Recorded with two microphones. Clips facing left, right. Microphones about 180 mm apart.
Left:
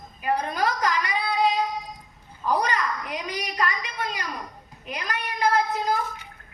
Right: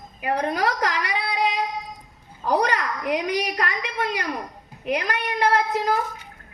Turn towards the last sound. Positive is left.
turn(degrees=-65)  # may be behind; listen again after turning